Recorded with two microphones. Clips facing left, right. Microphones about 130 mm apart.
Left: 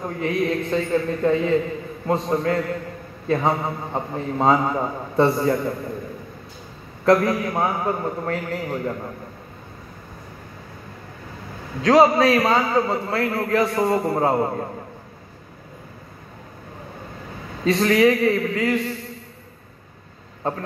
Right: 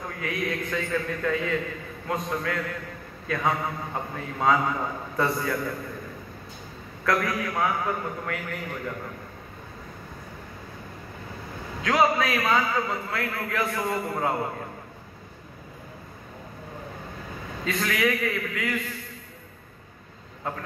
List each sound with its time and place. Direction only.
0.0 s a man's voice: 30° left (ahead or behind)
7.1 s a man's voice: 30° left (ahead or behind)
11.8 s a man's voice: 35° left (ahead or behind)
17.6 s a man's voice: 35° left (ahead or behind)